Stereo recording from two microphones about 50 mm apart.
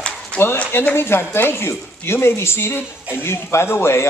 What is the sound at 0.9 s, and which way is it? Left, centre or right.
A man's voice, left.